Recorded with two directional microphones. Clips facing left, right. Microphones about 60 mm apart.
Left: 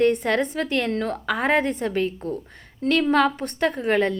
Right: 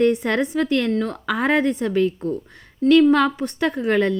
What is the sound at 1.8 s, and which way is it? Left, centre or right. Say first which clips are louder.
Speech: right 4 dB; left.